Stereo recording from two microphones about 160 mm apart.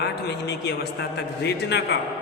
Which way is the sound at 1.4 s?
90° left.